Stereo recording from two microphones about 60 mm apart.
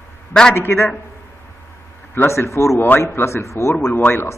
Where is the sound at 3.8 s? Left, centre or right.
Left.